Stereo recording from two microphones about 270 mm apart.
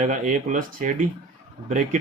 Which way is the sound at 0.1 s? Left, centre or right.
Right.